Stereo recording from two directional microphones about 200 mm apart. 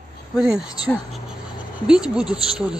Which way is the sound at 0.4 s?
5° right (ahead or behind).